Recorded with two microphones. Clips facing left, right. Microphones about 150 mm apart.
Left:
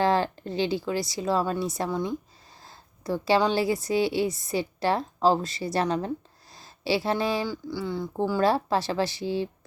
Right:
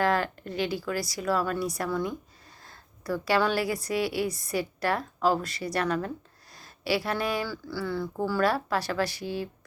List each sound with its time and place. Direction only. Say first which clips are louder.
0.0 s a woman's voice: left 2 dB; 30° left (ahead or behind)